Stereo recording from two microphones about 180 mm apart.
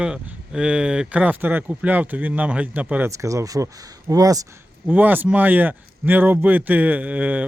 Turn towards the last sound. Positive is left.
turn(degrees=-5)  # may be behind; listen again after turning